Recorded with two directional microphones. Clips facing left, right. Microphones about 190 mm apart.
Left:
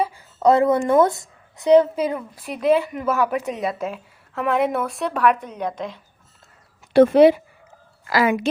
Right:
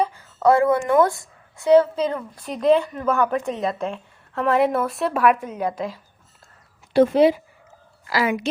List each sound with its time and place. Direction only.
0.0 s a sound: 15° left (ahead or behind)
0.9 s speech: 20° left (ahead or behind); by 6.0 s 5° right (ahead or behind)
6.9 s speech: 65° left (ahead or behind)
8.1 s a woman's voice: 50° left (ahead or behind)